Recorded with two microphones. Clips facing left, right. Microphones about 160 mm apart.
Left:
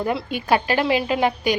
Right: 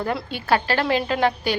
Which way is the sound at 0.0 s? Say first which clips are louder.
Left 2 dB; 15° left (ahead or behind).